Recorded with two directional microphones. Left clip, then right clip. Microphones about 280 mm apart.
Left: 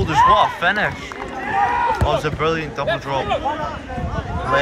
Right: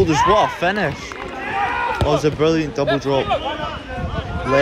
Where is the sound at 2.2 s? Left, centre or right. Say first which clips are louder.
Right 3 dB; right.